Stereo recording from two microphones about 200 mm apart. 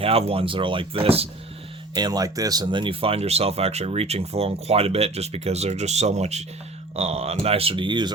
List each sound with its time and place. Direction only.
0.0 s speech: 30° right (ahead or behind)